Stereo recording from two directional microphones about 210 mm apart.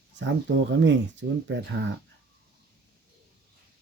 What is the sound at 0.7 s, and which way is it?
Speech, 60° right (ahead or behind).